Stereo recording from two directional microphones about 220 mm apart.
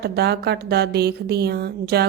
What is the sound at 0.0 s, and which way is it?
A woman's voice, 45° right (ahead or behind).